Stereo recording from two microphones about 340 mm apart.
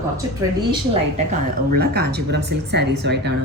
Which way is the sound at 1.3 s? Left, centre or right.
Right.